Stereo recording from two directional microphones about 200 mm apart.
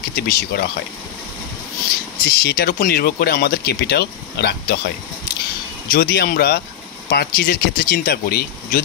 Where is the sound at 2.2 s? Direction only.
50° left (ahead or behind).